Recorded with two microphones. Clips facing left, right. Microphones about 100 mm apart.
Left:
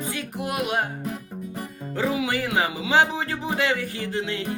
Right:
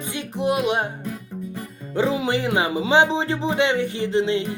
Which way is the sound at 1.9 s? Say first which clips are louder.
Right 4 dB; 25° right (ahead or behind).